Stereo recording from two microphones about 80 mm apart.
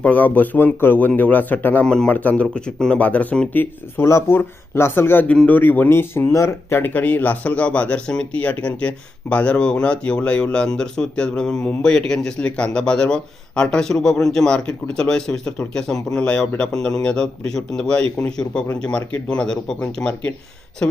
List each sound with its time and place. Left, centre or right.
0.0 s speech: left
3.0 s speech: centre
4.0 s speech: left; by 20.3 s centre